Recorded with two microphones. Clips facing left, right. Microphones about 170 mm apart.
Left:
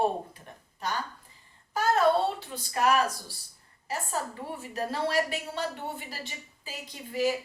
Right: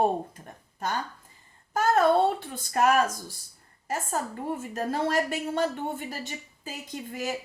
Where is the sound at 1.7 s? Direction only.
50° right (ahead or behind).